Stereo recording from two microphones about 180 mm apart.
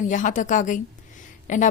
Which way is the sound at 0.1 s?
45° left (ahead or behind).